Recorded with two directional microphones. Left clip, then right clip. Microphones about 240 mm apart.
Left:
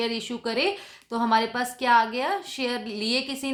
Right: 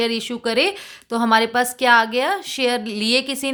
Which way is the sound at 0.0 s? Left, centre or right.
Right.